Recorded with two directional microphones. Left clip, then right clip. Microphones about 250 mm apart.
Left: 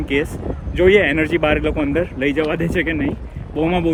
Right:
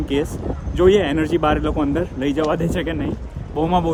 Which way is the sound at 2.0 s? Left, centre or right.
Right.